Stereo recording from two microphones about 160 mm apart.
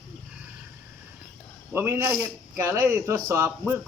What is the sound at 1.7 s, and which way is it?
Speech, 15° right (ahead or behind).